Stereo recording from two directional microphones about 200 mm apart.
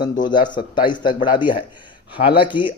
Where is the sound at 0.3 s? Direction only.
25° left (ahead or behind).